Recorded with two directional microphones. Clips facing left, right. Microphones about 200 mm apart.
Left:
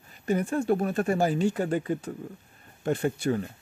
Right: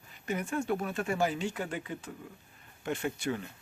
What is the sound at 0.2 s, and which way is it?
Speech, 35° left (ahead or behind).